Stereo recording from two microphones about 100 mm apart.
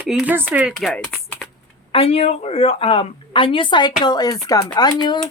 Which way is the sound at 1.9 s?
80° left.